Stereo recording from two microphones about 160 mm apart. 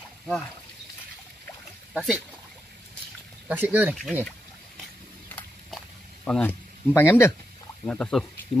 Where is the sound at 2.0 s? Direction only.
5° right (ahead or behind).